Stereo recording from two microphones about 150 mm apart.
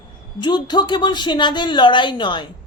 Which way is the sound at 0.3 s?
30° left (ahead or behind).